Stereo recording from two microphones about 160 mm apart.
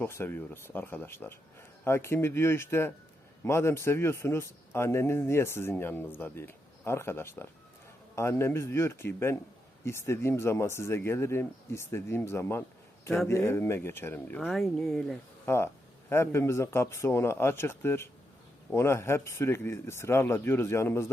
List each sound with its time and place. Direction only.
0.0 s speech: 15° left (ahead or behind)
14.5 s speech: centre (ahead or behind)
15.4 s speech: 15° left (ahead or behind)